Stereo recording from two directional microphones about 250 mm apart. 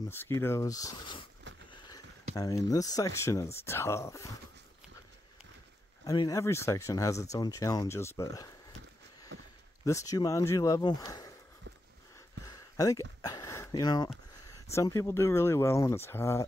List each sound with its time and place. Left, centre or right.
0.1 s speech: centre
2.3 s speech: centre
6.0 s speech: centre
9.3 s a sound: right
9.8 s speech: centre
12.4 s a sound: centre
14.7 s speech: centre